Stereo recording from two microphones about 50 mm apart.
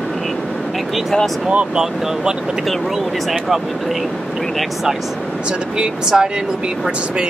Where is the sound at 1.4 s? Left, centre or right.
Centre.